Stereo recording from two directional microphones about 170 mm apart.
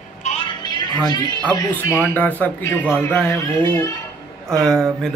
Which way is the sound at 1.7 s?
10° left (ahead or behind).